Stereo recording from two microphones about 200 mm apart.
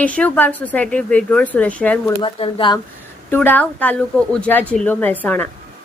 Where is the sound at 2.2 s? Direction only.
25° left (ahead or behind).